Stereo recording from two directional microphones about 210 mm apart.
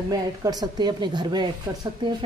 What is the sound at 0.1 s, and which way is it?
Speech, 20° right (ahead or behind).